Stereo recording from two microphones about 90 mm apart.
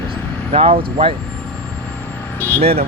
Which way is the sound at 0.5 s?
90° right.